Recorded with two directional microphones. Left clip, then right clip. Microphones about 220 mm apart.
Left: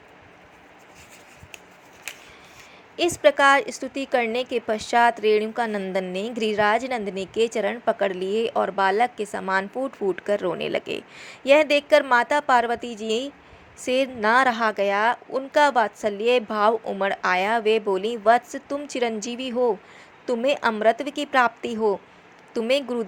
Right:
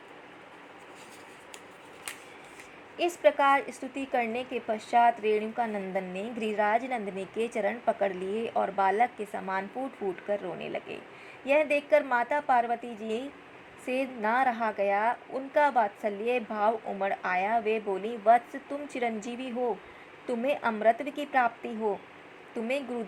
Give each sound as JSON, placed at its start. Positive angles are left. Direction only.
{"t": 3.0, "sound": "a woman's voice", "side_deg": 15}